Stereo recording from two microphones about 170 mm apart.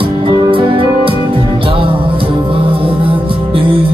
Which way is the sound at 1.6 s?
30° right (ahead or behind).